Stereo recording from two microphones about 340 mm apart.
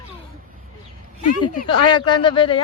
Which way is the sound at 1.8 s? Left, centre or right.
Centre.